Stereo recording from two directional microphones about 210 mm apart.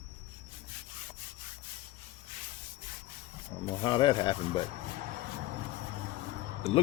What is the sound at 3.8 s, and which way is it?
Speech, 25° left (ahead or behind).